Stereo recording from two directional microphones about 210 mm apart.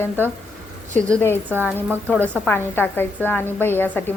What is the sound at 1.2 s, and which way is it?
Speech, 10° left (ahead or behind).